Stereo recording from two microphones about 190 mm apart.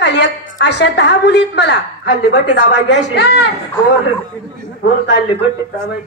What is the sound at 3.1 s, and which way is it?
Speech, 65° left (ahead or behind).